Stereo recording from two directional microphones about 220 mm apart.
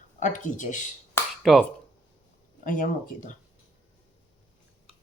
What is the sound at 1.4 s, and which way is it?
Speech, centre (ahead or behind).